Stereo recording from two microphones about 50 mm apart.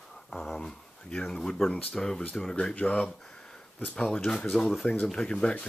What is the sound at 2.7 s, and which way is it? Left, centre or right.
Speech, left.